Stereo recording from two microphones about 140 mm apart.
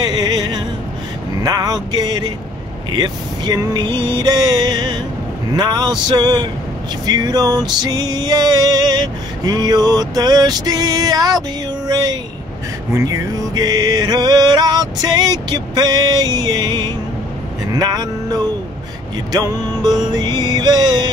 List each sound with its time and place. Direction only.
0.0 s music: 30° right (ahead or behind)
1.4 s a sound: 25° right (ahead or behind)
2.9 s music: 30° right (ahead or behind)